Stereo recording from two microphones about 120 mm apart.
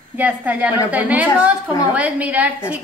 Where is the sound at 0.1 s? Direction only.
15° right (ahead or behind).